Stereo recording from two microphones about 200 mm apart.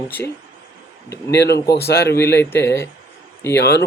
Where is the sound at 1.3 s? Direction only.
55° left (ahead or behind).